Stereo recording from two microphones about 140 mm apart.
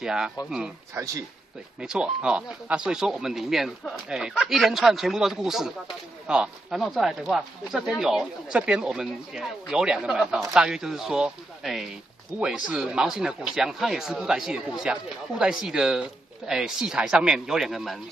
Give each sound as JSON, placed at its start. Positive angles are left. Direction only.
{"t": 0.0, "sound": "speech", "side_deg": -5}
{"t": 0.9, "sound": "speech", "side_deg": -20}
{"t": 1.8, "sound": "speech", "side_deg": -5}